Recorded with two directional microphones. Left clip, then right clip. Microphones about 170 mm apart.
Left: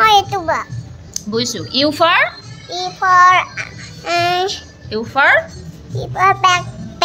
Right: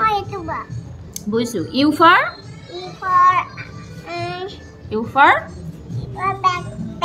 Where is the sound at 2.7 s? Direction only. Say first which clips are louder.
Left 5 dB; 45° left (ahead or behind).